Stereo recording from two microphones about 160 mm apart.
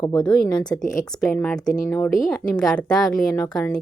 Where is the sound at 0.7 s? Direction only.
20° left (ahead or behind).